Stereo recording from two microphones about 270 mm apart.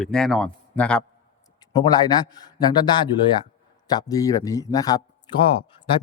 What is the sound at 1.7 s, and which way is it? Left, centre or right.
Speech, centre.